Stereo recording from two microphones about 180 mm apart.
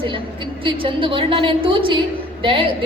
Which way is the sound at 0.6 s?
30° right (ahead or behind).